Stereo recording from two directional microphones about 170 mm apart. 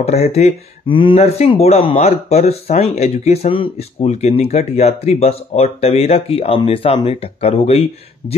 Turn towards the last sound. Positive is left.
turn(degrees=35)  # may be behind; listen again after turning